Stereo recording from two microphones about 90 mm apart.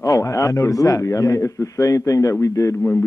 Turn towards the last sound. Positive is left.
turn(degrees=35)  # may be behind; listen again after turning